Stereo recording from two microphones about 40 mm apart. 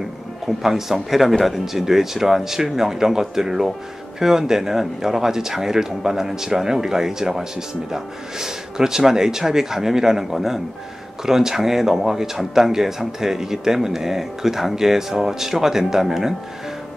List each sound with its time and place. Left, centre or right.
0.6 s speech: centre